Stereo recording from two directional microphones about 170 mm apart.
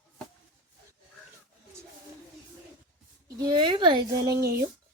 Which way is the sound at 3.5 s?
25° right (ahead or behind).